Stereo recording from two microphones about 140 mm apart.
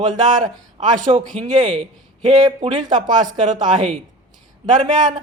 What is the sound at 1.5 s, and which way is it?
A man's voice, 30° right (ahead or behind).